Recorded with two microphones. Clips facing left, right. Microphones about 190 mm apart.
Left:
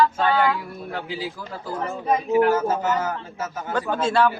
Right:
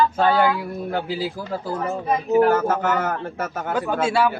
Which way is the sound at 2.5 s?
60° right (ahead or behind).